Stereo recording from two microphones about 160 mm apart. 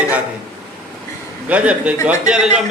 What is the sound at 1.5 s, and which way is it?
A man's voice, 10° right (ahead or behind).